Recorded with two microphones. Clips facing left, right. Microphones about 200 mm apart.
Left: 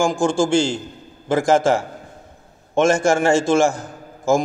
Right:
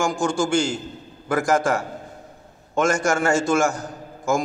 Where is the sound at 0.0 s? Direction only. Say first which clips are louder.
Left 4 dB; 30° left (ahead or behind).